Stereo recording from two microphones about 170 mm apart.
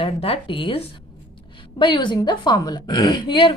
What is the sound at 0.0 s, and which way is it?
A woman's voice, 35° left (ahead or behind).